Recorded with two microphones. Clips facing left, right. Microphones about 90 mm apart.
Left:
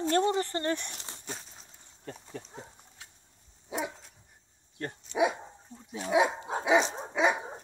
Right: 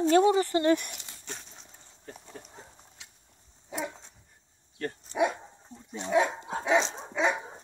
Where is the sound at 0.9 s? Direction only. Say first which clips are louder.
Left 1 dB; 40° left (ahead or behind).